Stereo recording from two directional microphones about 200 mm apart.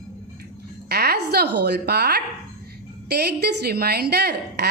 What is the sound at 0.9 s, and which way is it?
A woman's voice, 55° right (ahead or behind).